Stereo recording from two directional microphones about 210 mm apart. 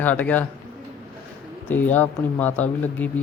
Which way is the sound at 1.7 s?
10° left (ahead or behind).